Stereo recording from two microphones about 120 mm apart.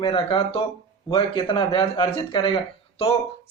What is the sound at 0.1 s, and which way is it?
Speech, 45° left (ahead or behind).